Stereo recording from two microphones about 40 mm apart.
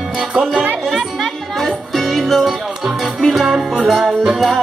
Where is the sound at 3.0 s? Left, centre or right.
Centre.